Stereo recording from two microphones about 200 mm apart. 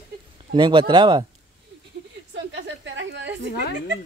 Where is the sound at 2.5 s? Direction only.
65° right (ahead or behind).